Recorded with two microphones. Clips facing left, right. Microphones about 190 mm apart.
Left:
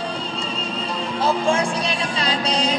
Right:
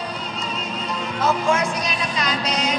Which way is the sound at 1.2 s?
30° left (ahead or behind).